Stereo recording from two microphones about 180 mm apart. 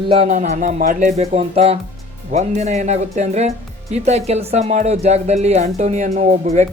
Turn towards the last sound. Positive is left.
turn(degrees=-40)  # may be behind; listen again after turning